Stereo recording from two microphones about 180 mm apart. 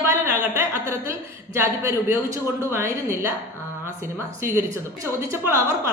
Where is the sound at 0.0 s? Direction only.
15° right (ahead or behind).